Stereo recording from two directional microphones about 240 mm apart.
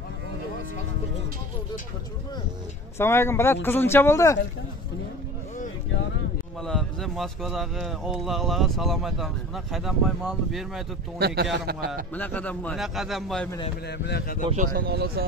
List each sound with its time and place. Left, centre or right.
3.0 s speech: centre
6.6 s speech: centre
11.1 s speech: right
12.2 s speech: centre
13.8 s speech: left
14.5 s speech: right